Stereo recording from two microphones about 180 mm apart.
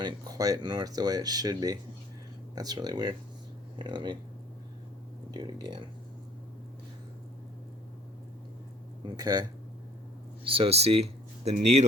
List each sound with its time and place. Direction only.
0.0 s speech: 20° right (ahead or behind)
5.3 s speech: 25° right (ahead or behind)
9.0 s speech: 20° right (ahead or behind); by 11.9 s 40° right (ahead or behind)